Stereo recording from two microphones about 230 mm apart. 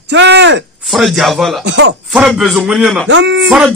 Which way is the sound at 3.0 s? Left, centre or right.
Right.